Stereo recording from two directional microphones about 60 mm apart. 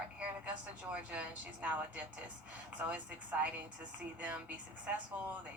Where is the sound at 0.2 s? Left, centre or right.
Right.